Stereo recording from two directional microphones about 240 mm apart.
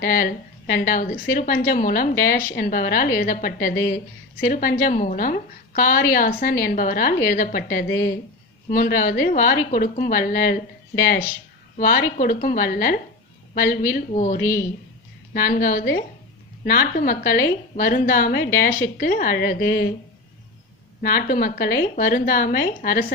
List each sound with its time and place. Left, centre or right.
0.0 s a woman's voice: left
21.0 s a woman's voice: left